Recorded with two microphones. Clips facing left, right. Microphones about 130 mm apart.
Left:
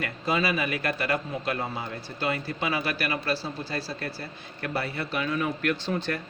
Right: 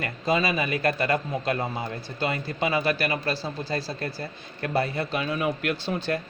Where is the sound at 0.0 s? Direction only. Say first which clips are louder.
Right 2 dB; 30° right (ahead or behind).